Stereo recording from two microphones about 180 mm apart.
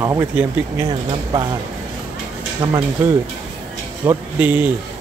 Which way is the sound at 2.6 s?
15° right (ahead or behind).